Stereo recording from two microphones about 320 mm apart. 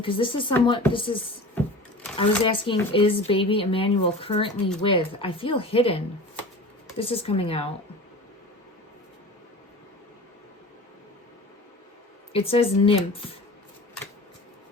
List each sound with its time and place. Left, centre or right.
0.0 s speech: centre
2.4 s speech: centre
7.0 s speech: centre
12.3 s speech: centre